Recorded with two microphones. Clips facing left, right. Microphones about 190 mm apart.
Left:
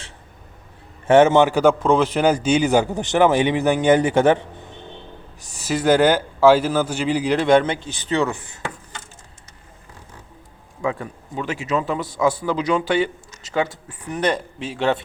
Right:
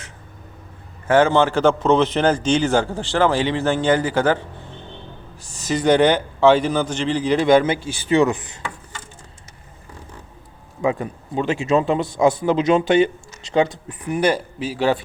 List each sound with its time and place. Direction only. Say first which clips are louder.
1.0 s a man's voice: left 2 dB; 20° left (ahead or behind)
5.6 s a man's voice: even; 5° left (ahead or behind); by 8.5 s 20° right (ahead or behind)
10.8 s speech: right 4 dB; 20° right (ahead or behind); by 15.0 s 5° right (ahead or behind)